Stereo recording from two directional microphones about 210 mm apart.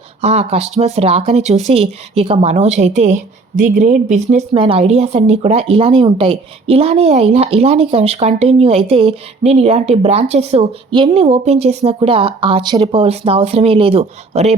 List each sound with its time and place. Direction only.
0.2 s speech: 30° right (ahead or behind)